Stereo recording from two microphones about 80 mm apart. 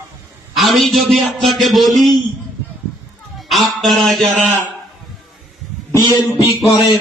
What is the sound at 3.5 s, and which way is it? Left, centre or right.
Speech, centre.